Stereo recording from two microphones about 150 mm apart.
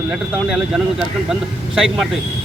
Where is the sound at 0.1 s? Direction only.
5° right (ahead or behind).